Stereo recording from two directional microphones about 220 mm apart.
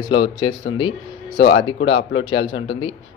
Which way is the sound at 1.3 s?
55° left (ahead or behind).